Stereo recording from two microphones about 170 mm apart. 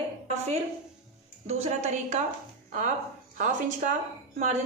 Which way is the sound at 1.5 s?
40° right (ahead or behind).